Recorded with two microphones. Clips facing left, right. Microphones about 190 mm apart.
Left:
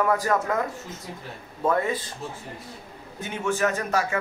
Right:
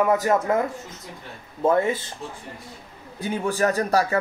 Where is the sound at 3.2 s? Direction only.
35° right (ahead or behind).